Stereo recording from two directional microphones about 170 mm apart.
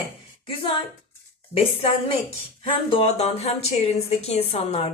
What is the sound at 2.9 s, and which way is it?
A woman's voice, 35° left (ahead or behind).